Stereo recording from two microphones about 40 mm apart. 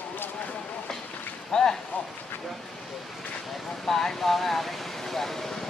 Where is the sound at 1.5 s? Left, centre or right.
Centre.